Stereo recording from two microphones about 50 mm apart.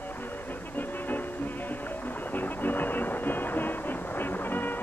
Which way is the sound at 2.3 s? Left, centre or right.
Left.